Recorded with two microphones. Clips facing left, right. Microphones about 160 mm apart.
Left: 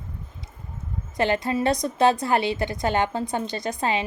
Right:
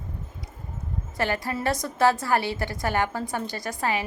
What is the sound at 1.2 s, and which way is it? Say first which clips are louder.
A woman's voice: left 4 dB; 20° left (ahead or behind).